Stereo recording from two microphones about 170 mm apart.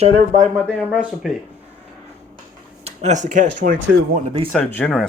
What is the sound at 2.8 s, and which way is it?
Speech, 40° right (ahead or behind).